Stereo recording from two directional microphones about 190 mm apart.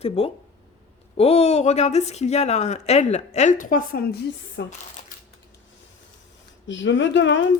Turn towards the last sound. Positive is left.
turn(degrees=75)  # may be behind; listen again after turning